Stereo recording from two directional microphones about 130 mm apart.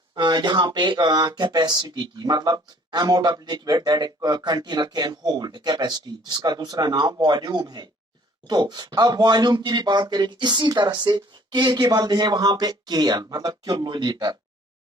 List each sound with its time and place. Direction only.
0.1 s speech: 35° right (ahead or behind)